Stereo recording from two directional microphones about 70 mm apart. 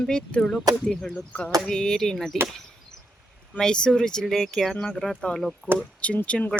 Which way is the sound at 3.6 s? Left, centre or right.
Centre.